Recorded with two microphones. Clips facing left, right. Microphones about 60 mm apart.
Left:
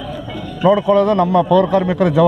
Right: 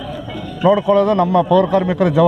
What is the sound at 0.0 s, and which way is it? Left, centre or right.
Speech, centre.